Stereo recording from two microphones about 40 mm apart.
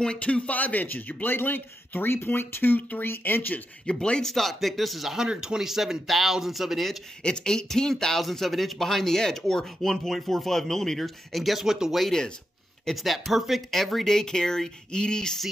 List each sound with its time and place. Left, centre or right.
0.2 s a man's voice: left
3.9 s speech: left
4.2 s speech: centre
5.1 s speech: centre
7.2 s speech: centre
11.6 s speech: centre